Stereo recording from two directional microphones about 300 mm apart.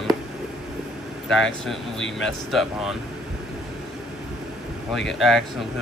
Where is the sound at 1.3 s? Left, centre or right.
Centre.